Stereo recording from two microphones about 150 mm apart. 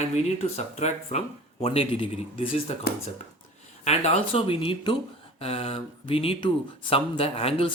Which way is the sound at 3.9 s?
45° left (ahead or behind).